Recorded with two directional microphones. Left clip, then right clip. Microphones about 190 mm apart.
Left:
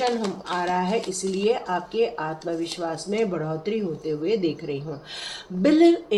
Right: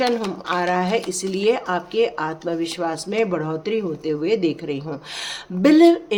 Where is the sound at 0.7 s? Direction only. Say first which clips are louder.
Right 3 dB; 55° right (ahead or behind).